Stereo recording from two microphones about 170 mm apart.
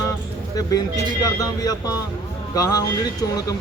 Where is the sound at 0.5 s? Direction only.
20° left (ahead or behind).